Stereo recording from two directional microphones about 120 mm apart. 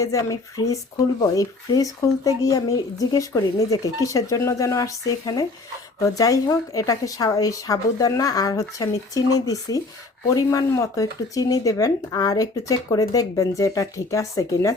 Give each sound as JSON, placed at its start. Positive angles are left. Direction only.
{"t": 0.0, "sound": "speech", "side_deg": 30}